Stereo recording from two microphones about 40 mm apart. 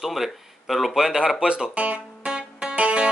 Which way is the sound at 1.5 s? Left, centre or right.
Right.